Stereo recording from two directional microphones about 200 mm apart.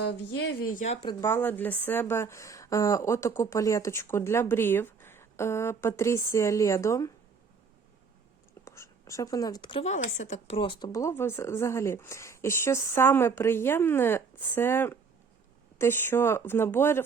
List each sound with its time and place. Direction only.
0.0 s speech: 55° left (ahead or behind)
1.0 s a woman's voice: 15° left (ahead or behind)
8.6 s a woman's voice: 15° left (ahead or behind)